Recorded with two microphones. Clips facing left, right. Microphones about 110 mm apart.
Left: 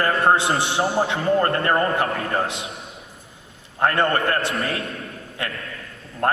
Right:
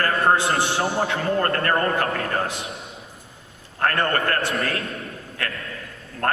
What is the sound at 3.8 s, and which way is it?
A man's voice, 20° left (ahead or behind).